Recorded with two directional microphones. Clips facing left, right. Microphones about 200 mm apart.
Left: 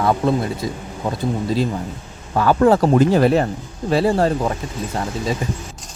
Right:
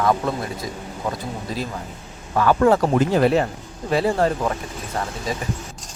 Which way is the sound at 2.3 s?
30° left (ahead or behind).